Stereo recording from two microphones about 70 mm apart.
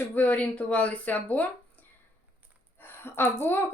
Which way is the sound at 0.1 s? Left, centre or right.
Left.